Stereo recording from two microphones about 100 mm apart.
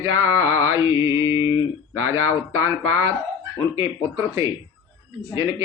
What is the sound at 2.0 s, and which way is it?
Speech, 25° right (ahead or behind).